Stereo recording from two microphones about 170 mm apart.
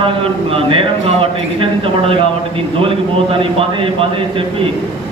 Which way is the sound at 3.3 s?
30° right (ahead or behind).